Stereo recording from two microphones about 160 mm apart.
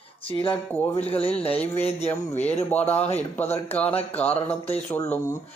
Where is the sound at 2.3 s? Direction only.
45° left (ahead or behind).